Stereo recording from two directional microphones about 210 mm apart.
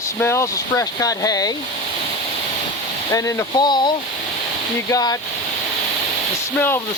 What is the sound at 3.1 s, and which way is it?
Speech, 15° left (ahead or behind).